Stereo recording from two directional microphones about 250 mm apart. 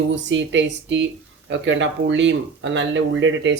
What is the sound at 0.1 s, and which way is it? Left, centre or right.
Speech, right.